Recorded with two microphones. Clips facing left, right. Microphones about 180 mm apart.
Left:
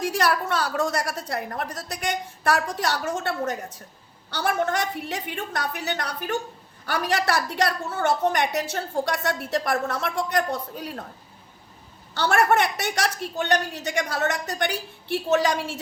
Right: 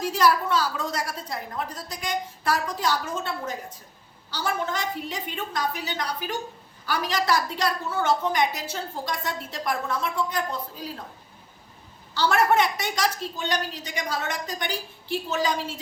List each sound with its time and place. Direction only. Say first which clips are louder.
0.0 s a woman's voice: right 1 dB; 65° left (ahead or behind)
12.1 s a woman's voice: left 1 dB; 65° left (ahead or behind)